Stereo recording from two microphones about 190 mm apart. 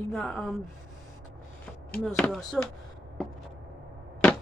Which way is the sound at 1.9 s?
5° left (ahead or behind).